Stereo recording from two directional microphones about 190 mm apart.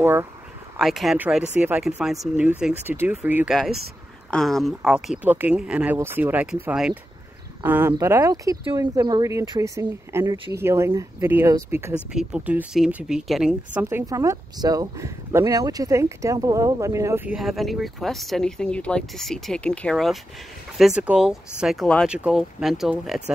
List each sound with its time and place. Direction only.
0.0 s speech: 10° right (ahead or behind)
0.7 s speech: centre (ahead or behind)
4.3 s speech: centre (ahead or behind)
13.8 s speech: 15° right (ahead or behind)